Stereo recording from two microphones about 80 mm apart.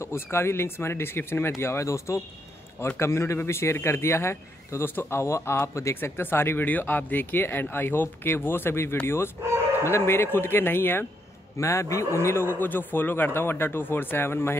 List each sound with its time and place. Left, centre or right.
0.0 s a man's voice: left
11.5 s a man's voice: left